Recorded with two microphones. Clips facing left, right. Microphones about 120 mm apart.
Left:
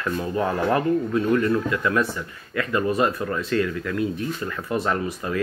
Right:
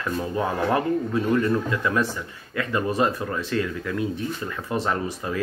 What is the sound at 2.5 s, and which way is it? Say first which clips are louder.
Speech: left 2 dB; 30° right (ahead or behind).